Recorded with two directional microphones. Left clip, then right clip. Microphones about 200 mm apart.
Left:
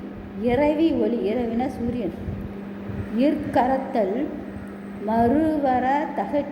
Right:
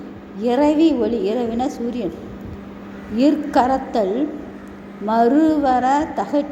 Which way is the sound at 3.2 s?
25° right (ahead or behind).